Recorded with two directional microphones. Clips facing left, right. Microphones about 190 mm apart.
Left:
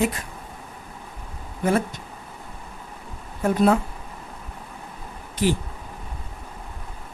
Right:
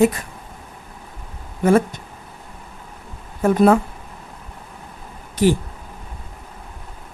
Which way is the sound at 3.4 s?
50° right (ahead or behind).